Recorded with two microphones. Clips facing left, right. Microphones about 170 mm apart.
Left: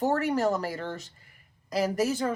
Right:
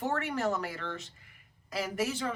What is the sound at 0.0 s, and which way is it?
Speech, 35° left (ahead or behind).